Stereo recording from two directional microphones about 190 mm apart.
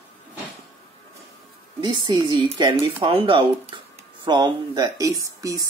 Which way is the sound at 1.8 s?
25° right (ahead or behind).